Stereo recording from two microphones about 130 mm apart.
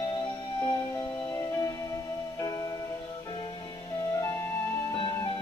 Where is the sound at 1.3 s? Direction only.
25° left (ahead or behind).